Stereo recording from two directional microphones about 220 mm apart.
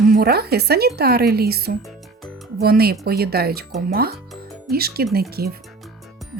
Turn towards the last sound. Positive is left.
turn(degrees=-45)  # may be behind; listen again after turning